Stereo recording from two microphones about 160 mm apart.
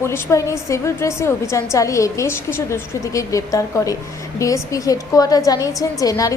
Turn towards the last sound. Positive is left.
turn(degrees=20)  # may be behind; listen again after turning